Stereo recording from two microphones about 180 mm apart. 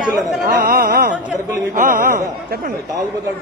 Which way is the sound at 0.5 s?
55° right (ahead or behind).